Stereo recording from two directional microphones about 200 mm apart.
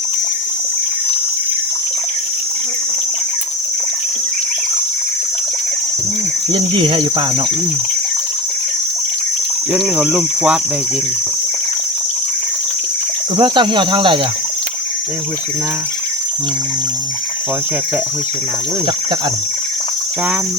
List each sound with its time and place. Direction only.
6.5 s speech: 25° right (ahead or behind)
9.9 s speech: 10° right (ahead or behind)
13.3 s speech: 25° right (ahead or behind)